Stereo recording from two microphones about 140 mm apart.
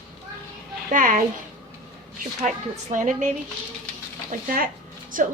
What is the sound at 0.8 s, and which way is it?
Speech, 75° right (ahead or behind).